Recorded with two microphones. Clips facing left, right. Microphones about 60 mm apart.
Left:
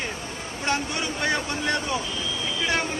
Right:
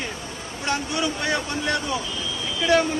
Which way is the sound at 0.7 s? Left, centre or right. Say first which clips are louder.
Right 2 dB; left.